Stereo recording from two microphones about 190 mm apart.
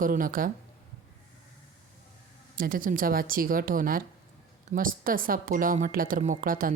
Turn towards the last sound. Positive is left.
turn(degrees=-45)  # may be behind; listen again after turning